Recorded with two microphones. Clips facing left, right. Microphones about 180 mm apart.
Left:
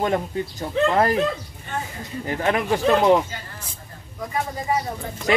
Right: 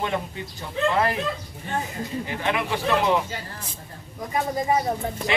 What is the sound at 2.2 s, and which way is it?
Speech, 40° left (ahead or behind).